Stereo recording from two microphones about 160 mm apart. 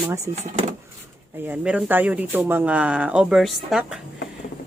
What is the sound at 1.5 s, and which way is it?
Speech, 10° right (ahead or behind).